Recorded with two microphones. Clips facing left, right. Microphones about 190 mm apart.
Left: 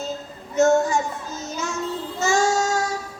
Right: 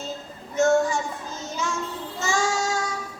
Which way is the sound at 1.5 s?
40° left (ahead or behind).